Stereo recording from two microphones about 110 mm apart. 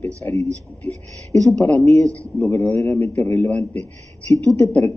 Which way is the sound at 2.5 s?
25° left (ahead or behind).